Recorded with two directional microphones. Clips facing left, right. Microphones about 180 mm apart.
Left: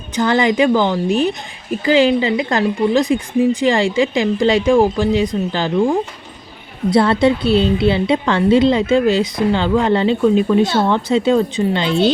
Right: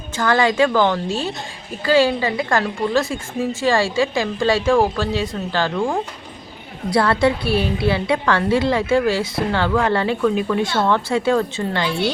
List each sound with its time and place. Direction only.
0.2 s a woman's voice: 20° left (ahead or behind)